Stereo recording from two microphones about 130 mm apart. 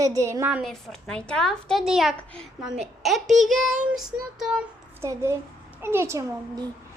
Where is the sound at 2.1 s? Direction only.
10° left (ahead or behind).